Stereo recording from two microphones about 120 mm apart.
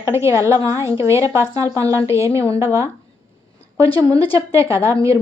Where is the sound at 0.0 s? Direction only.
25° right (ahead or behind).